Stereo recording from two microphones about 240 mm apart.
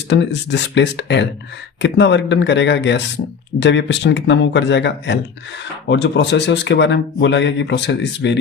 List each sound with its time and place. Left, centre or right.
0.1 s speech: left